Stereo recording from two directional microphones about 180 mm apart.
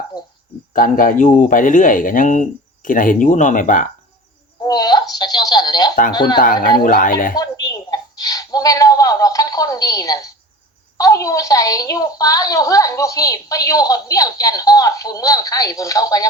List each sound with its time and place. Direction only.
0.7 s speech: 50° left (ahead or behind)
4.6 s a woman's voice: 25° left (ahead or behind)
6.8 s speech: 50° left (ahead or behind)
7.3 s a sound: 25° left (ahead or behind)
10.9 s a woman's voice: 20° left (ahead or behind)